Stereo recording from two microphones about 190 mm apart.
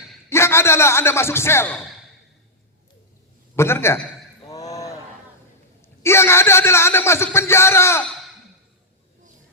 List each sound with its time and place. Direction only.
0.3 s a man's voice: 15° left (ahead or behind)
3.5 s speech: 15° left (ahead or behind)
4.4 s a sound: 20° left (ahead or behind)
6.0 s speech: 15° left (ahead or behind)